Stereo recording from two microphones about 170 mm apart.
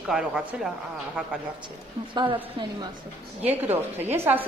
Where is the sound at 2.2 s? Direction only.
25° right (ahead or behind).